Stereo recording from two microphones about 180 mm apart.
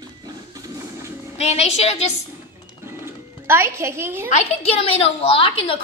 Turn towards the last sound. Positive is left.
turn(degrees=30)  # may be behind; listen again after turning